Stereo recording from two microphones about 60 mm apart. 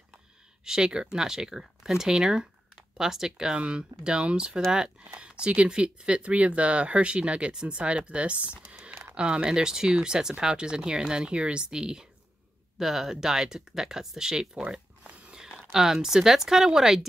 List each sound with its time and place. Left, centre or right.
0.7 s speech: centre
15.7 s speech: centre